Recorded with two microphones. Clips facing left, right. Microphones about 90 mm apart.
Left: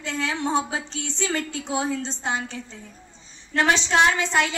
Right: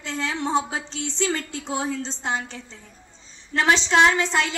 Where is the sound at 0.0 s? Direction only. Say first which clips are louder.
Left 1 dB; 30° right (ahead or behind).